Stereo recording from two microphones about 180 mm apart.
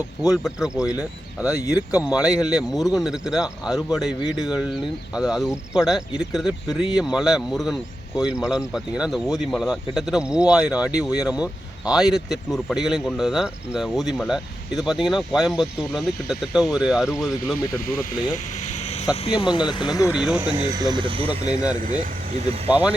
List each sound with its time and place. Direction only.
0.2 s speech: 5° right (ahead or behind)
17.7 s speech: 50° left (ahead or behind)
18.6 s a sound: 40° left (ahead or behind)
19.1 s speech: 30° left (ahead or behind)
20.1 s speech: 5° right (ahead or behind)
20.7 s speech: 20° right (ahead or behind)
22.7 s speech: 10° right (ahead or behind)